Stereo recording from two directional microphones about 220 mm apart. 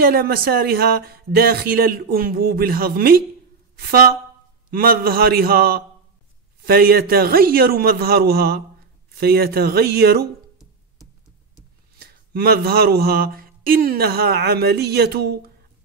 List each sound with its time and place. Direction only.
0.0 s a man's voice: 45° right (ahead or behind)
12.0 s speech: 45° right (ahead or behind)